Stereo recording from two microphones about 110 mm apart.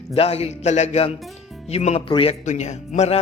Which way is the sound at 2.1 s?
55° left (ahead or behind).